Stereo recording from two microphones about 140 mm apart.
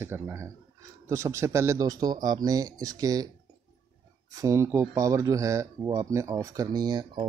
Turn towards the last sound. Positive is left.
turn(degrees=-30)  # may be behind; listen again after turning